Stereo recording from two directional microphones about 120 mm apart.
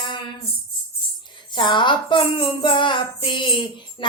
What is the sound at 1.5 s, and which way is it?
Speech, 40° left (ahead or behind).